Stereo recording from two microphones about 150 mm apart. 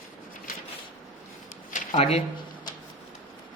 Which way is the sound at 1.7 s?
50° left (ahead or behind).